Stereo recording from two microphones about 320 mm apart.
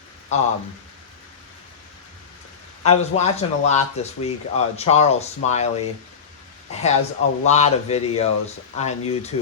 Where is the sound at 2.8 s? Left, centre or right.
Centre.